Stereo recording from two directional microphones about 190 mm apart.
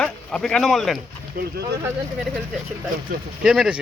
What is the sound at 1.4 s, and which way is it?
Speech, 50° right (ahead or behind).